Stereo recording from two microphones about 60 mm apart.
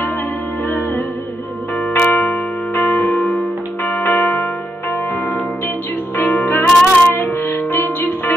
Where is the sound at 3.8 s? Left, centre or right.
Left.